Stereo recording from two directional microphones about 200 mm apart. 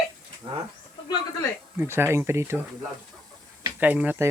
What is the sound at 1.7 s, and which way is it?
Speech, 10° right (ahead or behind).